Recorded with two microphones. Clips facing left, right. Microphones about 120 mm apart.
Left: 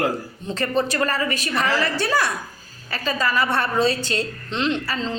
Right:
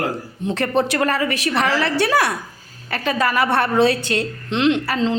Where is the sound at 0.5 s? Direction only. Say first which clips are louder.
Right 3 dB; 65° right (ahead or behind).